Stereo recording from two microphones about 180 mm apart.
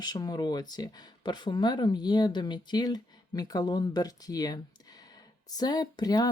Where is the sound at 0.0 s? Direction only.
20° left (ahead or behind).